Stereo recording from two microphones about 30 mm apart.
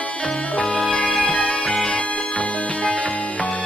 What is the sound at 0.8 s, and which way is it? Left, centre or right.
Music, left.